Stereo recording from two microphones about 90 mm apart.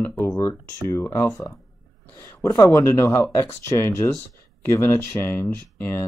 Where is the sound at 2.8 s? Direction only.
30° left (ahead or behind).